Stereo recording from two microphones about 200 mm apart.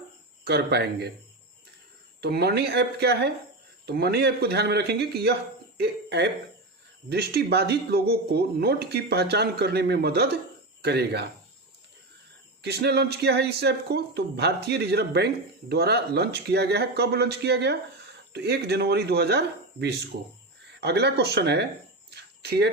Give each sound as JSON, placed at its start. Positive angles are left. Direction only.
{"t": 0.4, "sound": "speech", "side_deg": -55}
{"t": 2.2, "sound": "speech", "side_deg": -55}
{"t": 12.6, "sound": "speech", "side_deg": -55}
{"t": 22.1, "sound": "a sound", "side_deg": -55}